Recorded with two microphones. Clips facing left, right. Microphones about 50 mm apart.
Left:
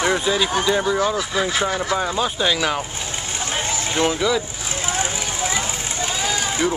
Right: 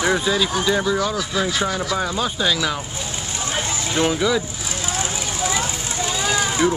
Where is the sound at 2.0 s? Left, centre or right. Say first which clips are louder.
Left 1 dB; centre.